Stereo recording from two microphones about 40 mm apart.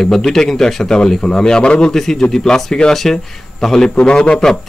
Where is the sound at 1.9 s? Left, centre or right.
Centre.